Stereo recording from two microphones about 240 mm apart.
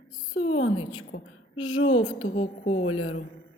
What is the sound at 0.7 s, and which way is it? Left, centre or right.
Speech, left.